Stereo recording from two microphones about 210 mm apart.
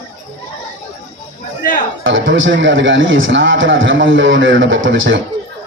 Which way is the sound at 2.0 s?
65° right (ahead or behind).